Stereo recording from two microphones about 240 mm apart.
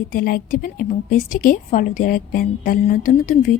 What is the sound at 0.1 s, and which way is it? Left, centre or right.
A woman's voice, left.